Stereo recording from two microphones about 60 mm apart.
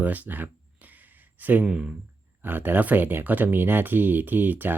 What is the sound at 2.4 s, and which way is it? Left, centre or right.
Speech, right.